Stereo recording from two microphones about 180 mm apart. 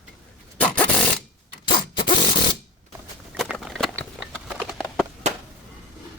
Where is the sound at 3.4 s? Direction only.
Centre (ahead or behind).